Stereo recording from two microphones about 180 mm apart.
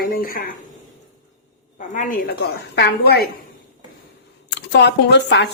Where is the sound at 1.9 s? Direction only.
50° left (ahead or behind).